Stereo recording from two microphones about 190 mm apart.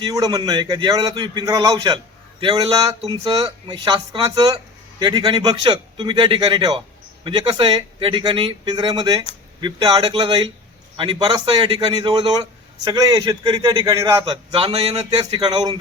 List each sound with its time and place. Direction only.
0.0 s a man's voice: 20° right (ahead or behind)